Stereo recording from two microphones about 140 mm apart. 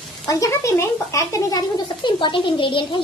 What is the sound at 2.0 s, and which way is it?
Speech, 35° left (ahead or behind).